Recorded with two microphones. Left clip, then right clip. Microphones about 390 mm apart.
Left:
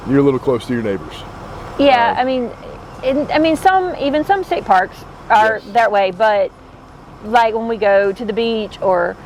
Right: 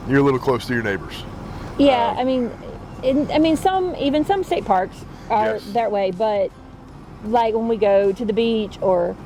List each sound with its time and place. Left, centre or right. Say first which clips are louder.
0.1 s speech: left 3 dB; right
1.8 s speech: left 5 dB; left